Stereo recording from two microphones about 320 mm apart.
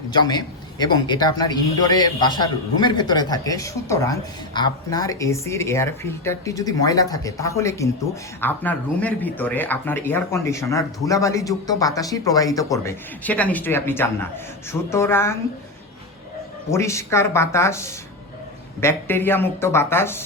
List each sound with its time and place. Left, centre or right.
0.1 s speech: centre
16.7 s speech: centre